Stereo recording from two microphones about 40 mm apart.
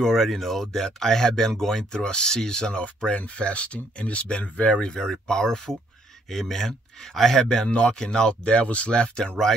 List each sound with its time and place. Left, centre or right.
0.2 s speech: centre
3.3 s speech: left; by 7.4 s centre
7.4 s speech: left